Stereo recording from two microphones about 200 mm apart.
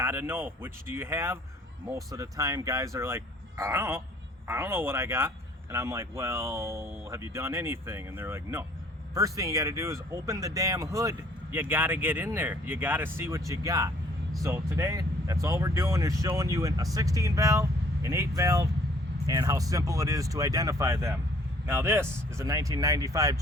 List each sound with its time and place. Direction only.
0.0 s speech: 10° right (ahead or behind)